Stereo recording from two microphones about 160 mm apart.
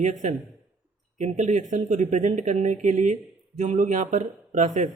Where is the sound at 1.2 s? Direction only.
45° right (ahead or behind).